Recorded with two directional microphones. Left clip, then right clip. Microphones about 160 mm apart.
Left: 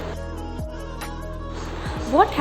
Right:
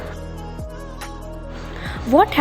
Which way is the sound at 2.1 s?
40° right (ahead or behind).